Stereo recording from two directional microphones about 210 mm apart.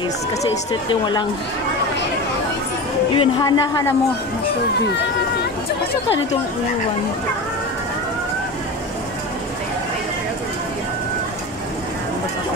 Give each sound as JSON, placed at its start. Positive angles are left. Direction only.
{"t": 0.7, "sound": "a woman's voice", "side_deg": 20}
{"t": 3.2, "sound": "a woman's voice", "side_deg": 20}
{"t": 4.8, "sound": "a sound", "side_deg": 55}